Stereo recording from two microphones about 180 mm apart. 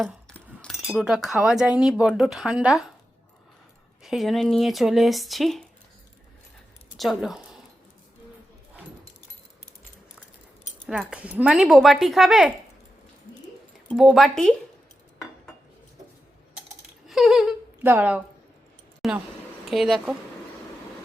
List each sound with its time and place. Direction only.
0.3 s speech: 5° left (ahead or behind)
4.0 s speech: centre (ahead or behind)
6.9 s speech: centre (ahead or behind)
10.6 s keys jangling: 40° left (ahead or behind)
10.8 s speech: 5° right (ahead or behind)
13.9 s speech: centre (ahead or behind)
17.1 s speech: centre (ahead or behind)